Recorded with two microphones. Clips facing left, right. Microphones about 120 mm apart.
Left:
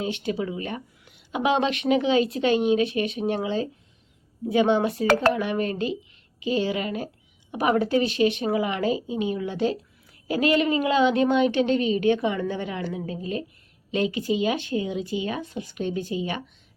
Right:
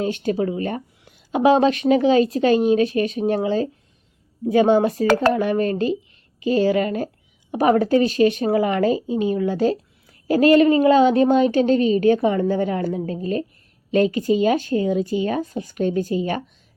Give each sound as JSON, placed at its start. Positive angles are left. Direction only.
{"t": 0.0, "sound": "a woman's voice", "side_deg": -45}